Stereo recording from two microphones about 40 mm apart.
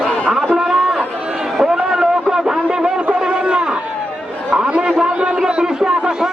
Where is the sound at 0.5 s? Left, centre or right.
Centre.